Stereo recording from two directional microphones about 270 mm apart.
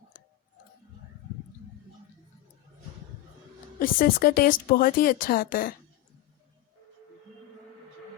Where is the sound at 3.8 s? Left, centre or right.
Left.